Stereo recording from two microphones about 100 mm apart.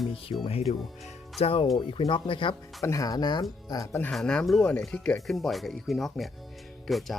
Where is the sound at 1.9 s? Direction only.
55° left (ahead or behind).